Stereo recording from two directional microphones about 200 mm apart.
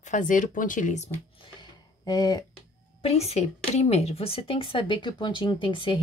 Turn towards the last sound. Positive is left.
turn(degrees=25)  # may be behind; listen again after turning